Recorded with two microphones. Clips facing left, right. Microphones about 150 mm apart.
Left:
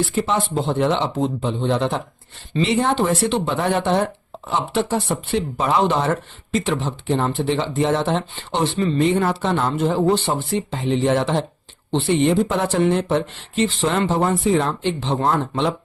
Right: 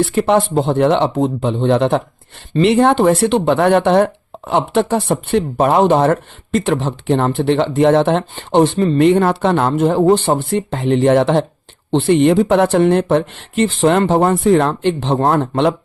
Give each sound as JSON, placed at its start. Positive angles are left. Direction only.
{"t": 0.1, "sound": "speech", "side_deg": -60}